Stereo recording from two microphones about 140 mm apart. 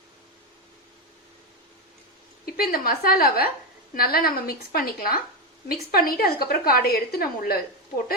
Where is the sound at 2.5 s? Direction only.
90° left.